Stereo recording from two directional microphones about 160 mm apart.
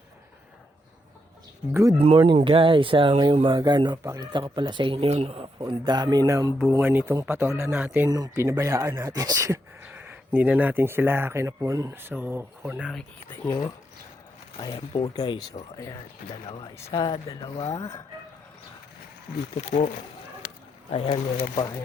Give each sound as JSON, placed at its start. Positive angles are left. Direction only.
{"t": 1.7, "sound": "speech", "side_deg": -20}
{"t": 2.0, "sound": "speech", "side_deg": -40}
{"t": 5.6, "sound": "speech", "side_deg": -25}
{"t": 8.1, "sound": "speech", "side_deg": -20}
{"t": 13.5, "sound": "speech", "side_deg": 20}
{"t": 16.7, "sound": "speech", "side_deg": 20}
{"t": 19.6, "sound": "speech", "side_deg": 45}
{"t": 20.9, "sound": "speech", "side_deg": 35}